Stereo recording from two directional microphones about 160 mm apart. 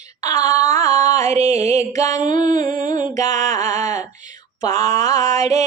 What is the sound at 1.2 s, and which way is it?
Music, 45° right (ahead or behind).